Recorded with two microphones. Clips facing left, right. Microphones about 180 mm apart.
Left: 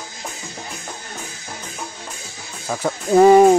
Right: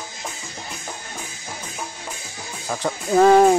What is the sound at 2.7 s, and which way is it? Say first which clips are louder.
Speech: left 3 dB; 10° left (ahead or behind).